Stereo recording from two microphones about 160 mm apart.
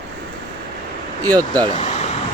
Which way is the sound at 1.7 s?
45° left (ahead or behind).